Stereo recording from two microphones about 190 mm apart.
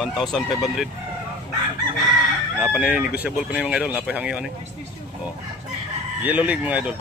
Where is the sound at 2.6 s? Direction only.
5° right (ahead or behind).